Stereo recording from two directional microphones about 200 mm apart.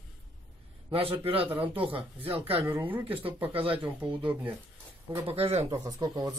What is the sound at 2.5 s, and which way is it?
Speech, 10° right (ahead or behind).